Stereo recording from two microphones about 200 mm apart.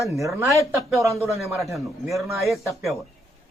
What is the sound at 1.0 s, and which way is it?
Speech, 15° right (ahead or behind).